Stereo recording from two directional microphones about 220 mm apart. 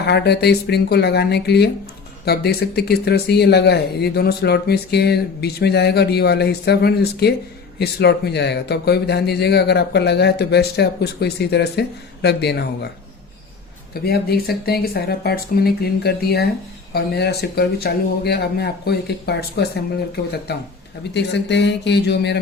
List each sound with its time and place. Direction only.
0.0 s speech: 50° left (ahead or behind)
13.9 s speech: 45° left (ahead or behind)